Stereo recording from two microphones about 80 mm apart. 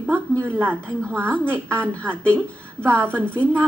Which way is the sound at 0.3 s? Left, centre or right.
Centre.